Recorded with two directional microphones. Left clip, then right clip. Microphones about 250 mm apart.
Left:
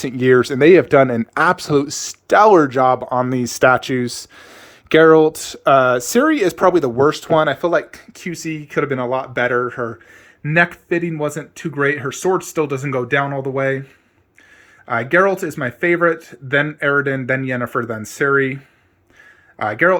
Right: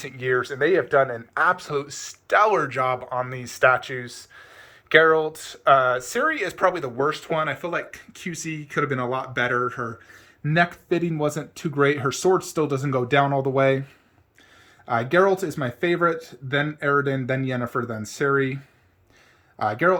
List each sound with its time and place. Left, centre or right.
0.0 s speech: left
7.3 s speech: left; by 13.8 s centre
14.8 s speech: centre
19.5 s speech: centre